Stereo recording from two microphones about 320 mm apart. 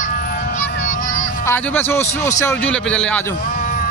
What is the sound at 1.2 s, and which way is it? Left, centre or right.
A man's voice, centre.